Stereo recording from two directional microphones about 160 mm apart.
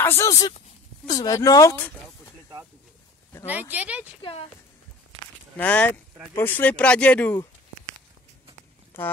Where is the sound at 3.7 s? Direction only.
10° right (ahead or behind).